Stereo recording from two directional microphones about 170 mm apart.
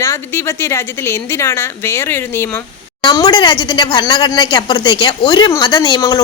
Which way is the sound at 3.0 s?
25° left (ahead or behind).